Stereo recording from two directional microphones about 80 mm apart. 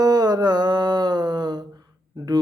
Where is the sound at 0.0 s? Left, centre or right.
Right.